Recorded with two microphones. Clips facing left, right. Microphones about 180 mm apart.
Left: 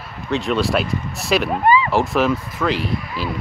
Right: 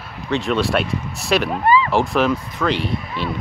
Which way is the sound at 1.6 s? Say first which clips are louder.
Even; 20° left (ahead or behind).